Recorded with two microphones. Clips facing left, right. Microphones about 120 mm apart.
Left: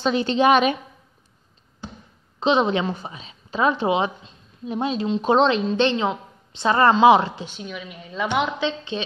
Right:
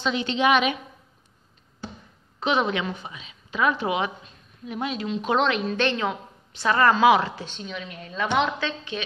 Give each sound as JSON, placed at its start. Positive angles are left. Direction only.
{"t": 0.0, "sound": "a woman's voice", "side_deg": 40}
{"t": 2.4, "sound": "a woman's voice", "side_deg": 25}
{"t": 7.4, "sound": "a woman's voice", "side_deg": 5}
{"t": 8.5, "sound": "a woman's voice", "side_deg": 25}